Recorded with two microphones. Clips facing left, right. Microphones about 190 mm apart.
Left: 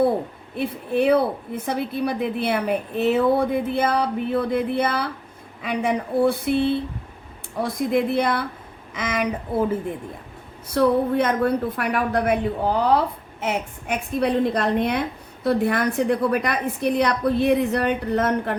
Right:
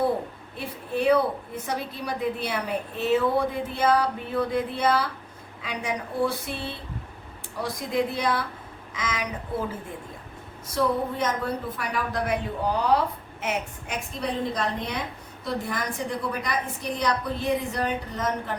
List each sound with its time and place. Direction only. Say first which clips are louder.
0.5 s a woman's voice: left 7 dB; 55° left (ahead or behind)
10.8 s a woman's voice: left 7 dB; 60° left (ahead or behind)